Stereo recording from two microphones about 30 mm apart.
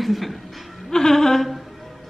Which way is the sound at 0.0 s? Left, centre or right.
Centre.